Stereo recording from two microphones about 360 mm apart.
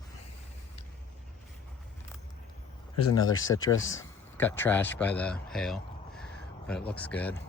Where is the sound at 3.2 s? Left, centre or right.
Left.